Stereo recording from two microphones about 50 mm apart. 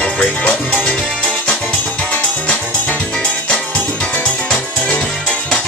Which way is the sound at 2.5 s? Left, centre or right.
Left.